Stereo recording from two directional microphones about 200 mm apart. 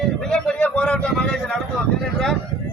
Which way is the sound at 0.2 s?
5° left (ahead or behind).